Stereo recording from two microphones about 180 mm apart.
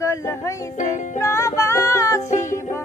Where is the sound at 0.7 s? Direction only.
45° left (ahead or behind).